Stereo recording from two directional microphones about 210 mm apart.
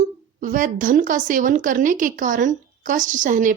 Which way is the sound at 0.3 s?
40° right (ahead or behind).